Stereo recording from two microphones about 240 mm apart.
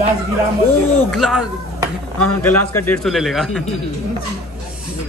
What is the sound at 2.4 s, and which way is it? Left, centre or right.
Speech, centre.